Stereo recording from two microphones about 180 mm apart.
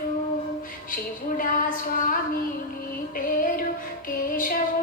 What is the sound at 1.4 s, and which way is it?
Music, 50° left (ahead or behind).